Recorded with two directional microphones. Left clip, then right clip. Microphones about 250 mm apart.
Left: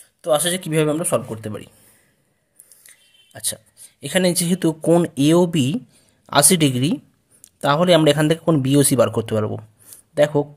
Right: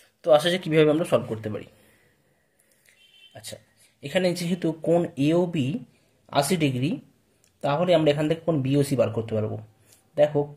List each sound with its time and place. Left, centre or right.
0.0 s speech: left
2.9 s a sound: left
4.0 s speech: left